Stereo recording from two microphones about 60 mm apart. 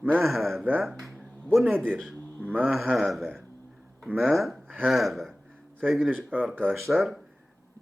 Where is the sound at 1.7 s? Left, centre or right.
Centre.